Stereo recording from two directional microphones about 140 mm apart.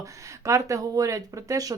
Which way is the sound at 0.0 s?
20° right (ahead or behind).